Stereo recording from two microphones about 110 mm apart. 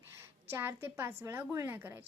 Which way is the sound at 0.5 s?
20° right (ahead or behind).